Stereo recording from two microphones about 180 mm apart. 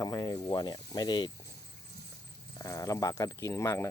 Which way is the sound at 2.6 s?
20° left (ahead or behind).